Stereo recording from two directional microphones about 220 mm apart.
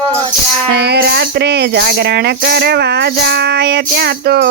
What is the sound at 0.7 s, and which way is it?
Music, 50° right (ahead or behind).